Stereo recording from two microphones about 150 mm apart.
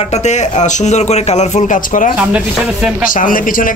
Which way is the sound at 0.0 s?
50° left (ahead or behind).